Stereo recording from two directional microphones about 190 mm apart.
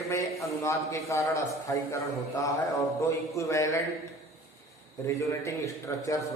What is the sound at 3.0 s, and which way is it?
Speech, 15° left (ahead or behind).